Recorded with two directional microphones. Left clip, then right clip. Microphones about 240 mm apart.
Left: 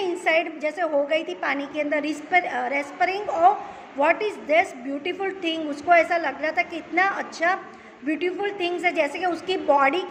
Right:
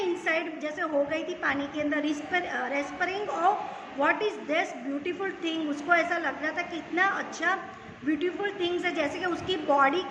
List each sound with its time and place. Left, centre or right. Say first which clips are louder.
0.0 s a woman's voice: left 6 dB; left